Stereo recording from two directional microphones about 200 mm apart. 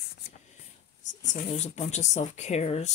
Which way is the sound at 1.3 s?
35° left (ahead or behind).